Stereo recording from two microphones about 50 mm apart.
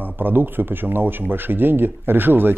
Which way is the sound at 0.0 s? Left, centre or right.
Right.